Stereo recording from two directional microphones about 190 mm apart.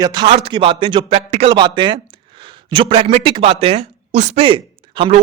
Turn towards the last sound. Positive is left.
turn(degrees=-25)  # may be behind; listen again after turning